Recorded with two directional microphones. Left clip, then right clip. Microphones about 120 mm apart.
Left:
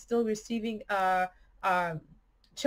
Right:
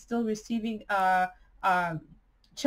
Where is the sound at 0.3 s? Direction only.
25° left (ahead or behind).